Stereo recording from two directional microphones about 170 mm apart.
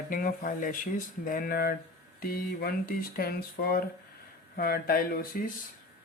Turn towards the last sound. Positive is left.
turn(degrees=60)  # may be behind; listen again after turning